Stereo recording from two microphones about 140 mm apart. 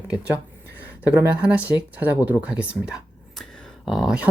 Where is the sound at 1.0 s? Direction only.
10° right (ahead or behind).